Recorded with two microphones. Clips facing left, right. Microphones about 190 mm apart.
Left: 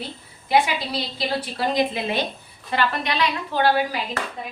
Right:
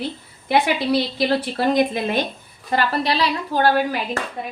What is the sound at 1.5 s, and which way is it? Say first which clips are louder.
A woman's voice: right 2 dB; 50° right (ahead or behind).